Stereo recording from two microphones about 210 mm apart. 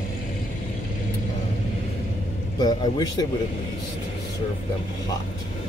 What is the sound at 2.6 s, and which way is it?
Speech, 20° left (ahead or behind).